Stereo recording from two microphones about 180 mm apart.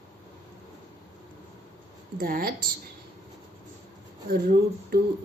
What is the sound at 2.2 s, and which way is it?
Speech, 55° right (ahead or behind).